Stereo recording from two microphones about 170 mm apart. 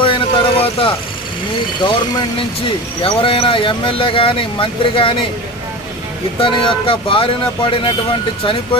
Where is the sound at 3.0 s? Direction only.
30° left (ahead or behind).